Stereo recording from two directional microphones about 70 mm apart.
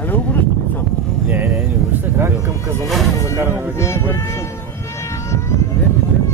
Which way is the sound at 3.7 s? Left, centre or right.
Left.